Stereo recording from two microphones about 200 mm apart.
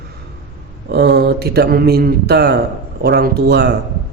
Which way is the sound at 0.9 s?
55° right (ahead or behind).